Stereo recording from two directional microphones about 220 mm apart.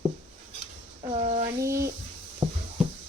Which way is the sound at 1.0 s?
25° right (ahead or behind).